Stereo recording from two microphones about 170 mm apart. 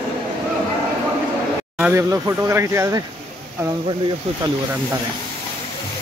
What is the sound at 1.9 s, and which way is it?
Speech, 15° right (ahead or behind).